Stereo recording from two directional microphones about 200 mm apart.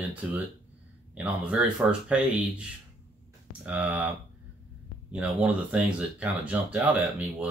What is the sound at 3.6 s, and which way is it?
Speech, 5° right (ahead or behind).